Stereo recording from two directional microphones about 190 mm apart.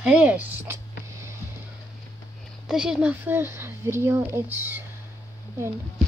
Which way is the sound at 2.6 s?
5° right (ahead or behind).